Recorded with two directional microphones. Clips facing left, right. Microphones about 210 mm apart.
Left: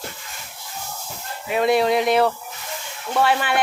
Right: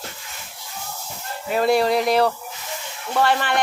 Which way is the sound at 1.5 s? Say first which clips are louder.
Even; centre (ahead or behind).